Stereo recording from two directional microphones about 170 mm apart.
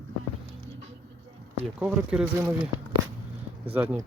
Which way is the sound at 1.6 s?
5° right (ahead or behind).